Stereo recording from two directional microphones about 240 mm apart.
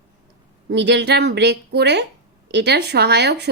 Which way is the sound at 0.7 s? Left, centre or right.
Right.